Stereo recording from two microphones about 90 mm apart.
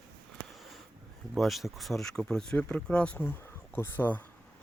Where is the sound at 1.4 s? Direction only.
Centre (ahead or behind); by 4.2 s 20° left (ahead or behind).